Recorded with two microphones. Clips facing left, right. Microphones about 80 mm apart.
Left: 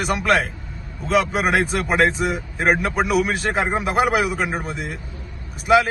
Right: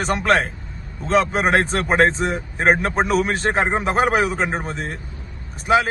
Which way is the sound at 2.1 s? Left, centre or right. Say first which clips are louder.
Even; centre.